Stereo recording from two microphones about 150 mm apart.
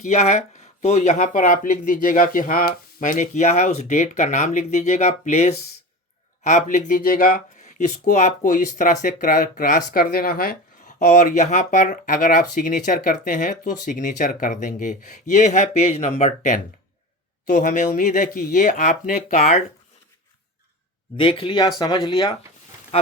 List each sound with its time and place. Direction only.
0.0 s speech: 45° left (ahead or behind); by 7.9 s 75° left (ahead or behind)
8.0 s speech: 55° left (ahead or behind); by 10.6 s 85° left
11.0 s speech: 55° left (ahead or behind)
21.2 s speech: 35° left (ahead or behind)